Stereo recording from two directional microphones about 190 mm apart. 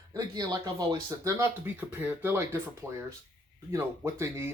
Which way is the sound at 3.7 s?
15° right (ahead or behind).